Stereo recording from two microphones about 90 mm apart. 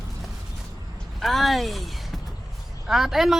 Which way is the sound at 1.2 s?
Centre (ahead or behind).